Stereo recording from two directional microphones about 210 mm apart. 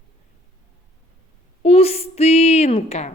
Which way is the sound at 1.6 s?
30° left (ahead or behind).